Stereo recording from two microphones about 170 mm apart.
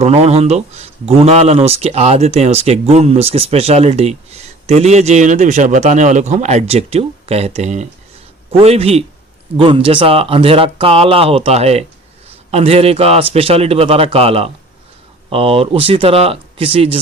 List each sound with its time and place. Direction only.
0.0 s speech: 40° right (ahead or behind)